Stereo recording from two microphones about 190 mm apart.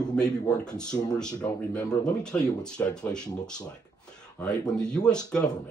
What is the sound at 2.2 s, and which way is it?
Speech, 5° left (ahead or behind).